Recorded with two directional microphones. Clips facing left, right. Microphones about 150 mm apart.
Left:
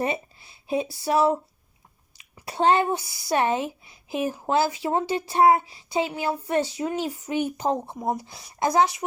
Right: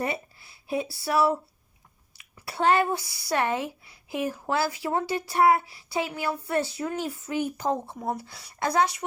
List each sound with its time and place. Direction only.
0.0 s speech: 20° left (ahead or behind)